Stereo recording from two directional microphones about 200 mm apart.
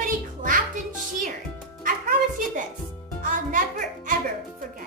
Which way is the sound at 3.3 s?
40° right (ahead or behind).